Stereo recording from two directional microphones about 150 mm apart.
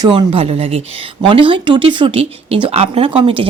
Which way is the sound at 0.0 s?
30° right (ahead or behind).